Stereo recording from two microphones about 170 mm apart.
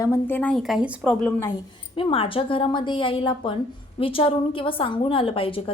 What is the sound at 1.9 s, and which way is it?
A woman's voice, 30° left (ahead or behind).